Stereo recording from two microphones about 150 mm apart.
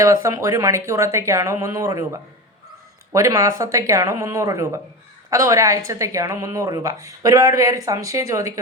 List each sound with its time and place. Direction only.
0.0 s a woman's voice: 20° right (ahead or behind)
3.1 s a woman's voice: 20° right (ahead or behind)